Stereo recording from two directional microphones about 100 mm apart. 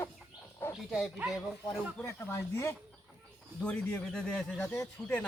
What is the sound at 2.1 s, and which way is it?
Speech, 25° left (ahead or behind).